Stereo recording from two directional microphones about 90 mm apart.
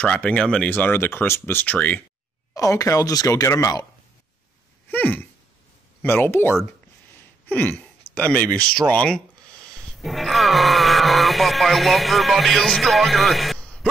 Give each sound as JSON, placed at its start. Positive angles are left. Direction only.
{"t": 0.0, "sound": "speech", "side_deg": 15}
{"t": 2.5, "sound": "speech", "side_deg": 35}
{"t": 4.8, "sound": "a sound", "side_deg": 20}
{"t": 6.0, "sound": "speech", "side_deg": 25}
{"t": 13.6, "sound": "music", "side_deg": 10}